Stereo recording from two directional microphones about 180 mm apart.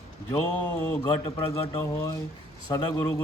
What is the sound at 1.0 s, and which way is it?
Mantra, 25° left (ahead or behind).